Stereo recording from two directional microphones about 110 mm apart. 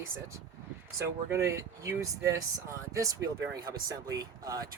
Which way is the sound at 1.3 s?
25° right (ahead or behind).